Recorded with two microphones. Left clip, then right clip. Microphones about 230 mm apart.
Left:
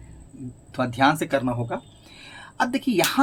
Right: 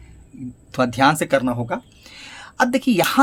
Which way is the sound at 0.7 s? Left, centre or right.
Right.